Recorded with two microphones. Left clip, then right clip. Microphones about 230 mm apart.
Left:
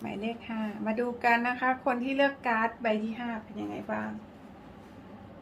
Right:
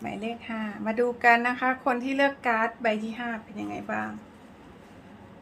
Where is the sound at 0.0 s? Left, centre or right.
Right.